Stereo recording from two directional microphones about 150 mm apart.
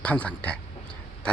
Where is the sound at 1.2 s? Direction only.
5° left (ahead or behind).